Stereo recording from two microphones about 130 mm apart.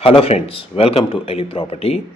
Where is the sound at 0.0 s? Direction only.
45° left (ahead or behind).